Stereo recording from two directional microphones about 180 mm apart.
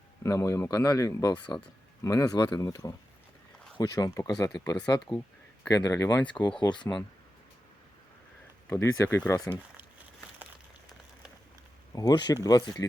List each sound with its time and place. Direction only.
0.2 s speech: 15° left (ahead or behind)
6.6 s speech: 25° left (ahead or behind)
8.7 s speech: 15° left (ahead or behind)
11.9 s speech: 20° left (ahead or behind)